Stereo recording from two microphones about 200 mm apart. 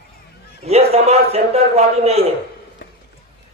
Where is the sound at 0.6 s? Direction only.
30° right (ahead or behind).